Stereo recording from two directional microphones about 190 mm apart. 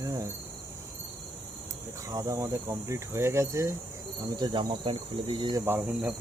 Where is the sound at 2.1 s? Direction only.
15° right (ahead or behind).